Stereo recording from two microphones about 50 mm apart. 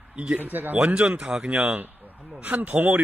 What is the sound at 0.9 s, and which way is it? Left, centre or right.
Speech, right.